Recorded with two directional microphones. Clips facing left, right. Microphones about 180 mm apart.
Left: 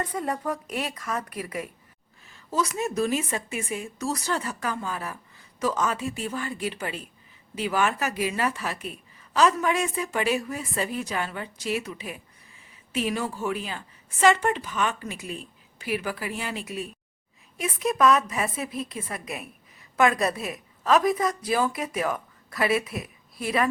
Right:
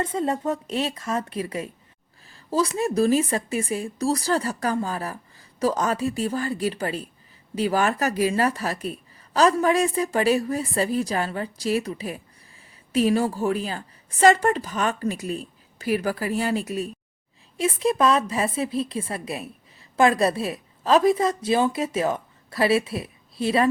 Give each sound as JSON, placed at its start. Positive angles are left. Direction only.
{"t": 0.0, "sound": "a woman's voice", "side_deg": -25}
{"t": 17.6, "sound": "a woman's voice", "side_deg": -30}